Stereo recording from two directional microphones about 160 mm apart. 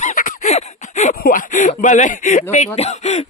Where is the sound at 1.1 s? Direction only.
60° left (ahead or behind).